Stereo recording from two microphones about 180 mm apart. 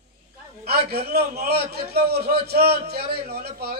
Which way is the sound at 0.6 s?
60° right (ahead or behind).